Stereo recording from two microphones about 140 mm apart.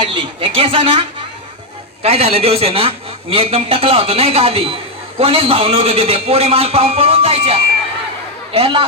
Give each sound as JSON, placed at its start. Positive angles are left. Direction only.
{"t": 0.0, "sound": "a woman's voice", "side_deg": -40}